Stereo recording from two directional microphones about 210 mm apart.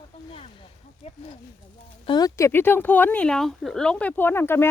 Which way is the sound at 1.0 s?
30° left (ahead or behind).